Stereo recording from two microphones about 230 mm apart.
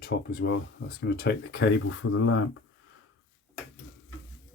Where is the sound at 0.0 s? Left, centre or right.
Left.